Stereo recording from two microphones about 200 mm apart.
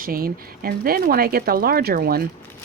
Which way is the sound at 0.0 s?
45° right (ahead or behind).